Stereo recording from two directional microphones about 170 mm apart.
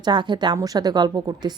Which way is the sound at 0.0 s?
25° right (ahead or behind).